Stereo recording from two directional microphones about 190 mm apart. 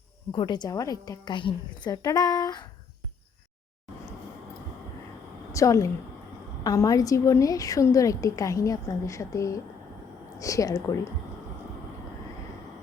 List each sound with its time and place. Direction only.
0.3 s a woman's voice: 25° left (ahead or behind)
5.5 s a woman's voice: 15° left (ahead or behind)